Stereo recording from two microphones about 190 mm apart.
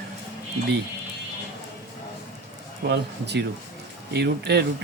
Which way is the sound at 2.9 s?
60° right (ahead or behind).